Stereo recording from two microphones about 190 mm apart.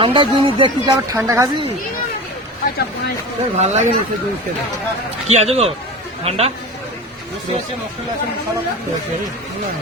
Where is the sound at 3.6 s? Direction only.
40° right (ahead or behind).